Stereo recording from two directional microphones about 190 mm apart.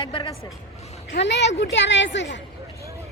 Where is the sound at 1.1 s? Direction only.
65° left (ahead or behind).